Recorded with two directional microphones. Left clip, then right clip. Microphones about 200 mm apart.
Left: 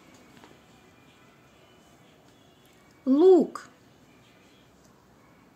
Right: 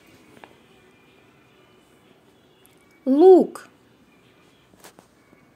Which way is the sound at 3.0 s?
5° right (ahead or behind).